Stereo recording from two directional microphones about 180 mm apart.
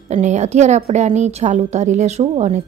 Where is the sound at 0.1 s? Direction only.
40° right (ahead or behind).